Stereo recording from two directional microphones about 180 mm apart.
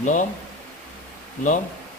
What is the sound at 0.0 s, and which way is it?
Speech, 45° left (ahead or behind).